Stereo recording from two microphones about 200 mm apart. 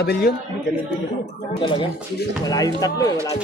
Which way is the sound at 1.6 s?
25° left (ahead or behind).